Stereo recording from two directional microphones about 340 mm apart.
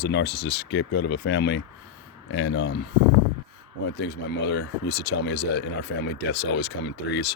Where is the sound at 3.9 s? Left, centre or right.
Left.